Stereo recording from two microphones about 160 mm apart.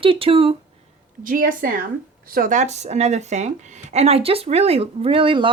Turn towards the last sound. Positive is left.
turn(degrees=-30)  # may be behind; listen again after turning